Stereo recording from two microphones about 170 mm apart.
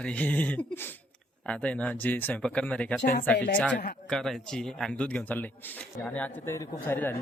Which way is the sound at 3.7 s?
75° left (ahead or behind).